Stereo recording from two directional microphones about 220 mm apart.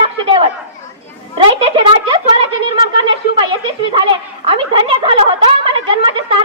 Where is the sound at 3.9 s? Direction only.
25° right (ahead or behind).